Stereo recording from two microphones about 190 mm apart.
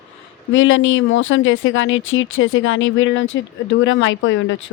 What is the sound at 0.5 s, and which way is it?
A woman's voice, 90° left.